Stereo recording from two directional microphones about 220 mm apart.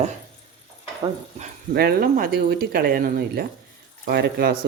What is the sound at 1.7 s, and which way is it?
Speech, 45° right (ahead or behind).